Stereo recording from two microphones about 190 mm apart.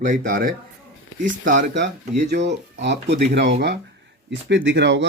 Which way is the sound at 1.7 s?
65° right (ahead or behind).